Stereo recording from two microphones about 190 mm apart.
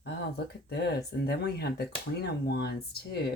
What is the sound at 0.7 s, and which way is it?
Speech, 60° left (ahead or behind).